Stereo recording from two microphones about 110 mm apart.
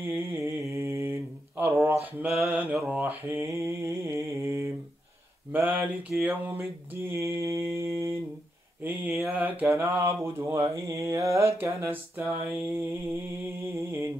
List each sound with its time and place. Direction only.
0.1 s mantra: 25° right (ahead or behind)
1.6 s a sound: 20° right (ahead or behind)
2.2 s mantra: 10° right (ahead or behind); by 8.2 s 25° right (ahead or behind)
9.3 s mantra: 15° right (ahead or behind)